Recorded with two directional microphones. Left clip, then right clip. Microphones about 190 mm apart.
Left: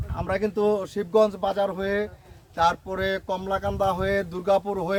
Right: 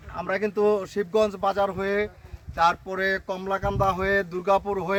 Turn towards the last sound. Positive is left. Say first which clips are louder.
# even
turn(degrees=-10)  # may be behind; listen again after turning